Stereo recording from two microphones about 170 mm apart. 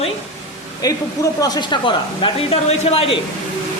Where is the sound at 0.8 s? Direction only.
25° left (ahead or behind).